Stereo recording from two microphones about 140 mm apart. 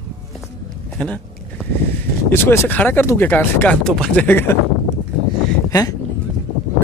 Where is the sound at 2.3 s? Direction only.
15° left (ahead or behind).